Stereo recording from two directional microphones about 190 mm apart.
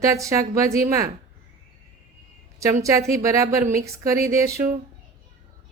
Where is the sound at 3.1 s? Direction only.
15° right (ahead or behind).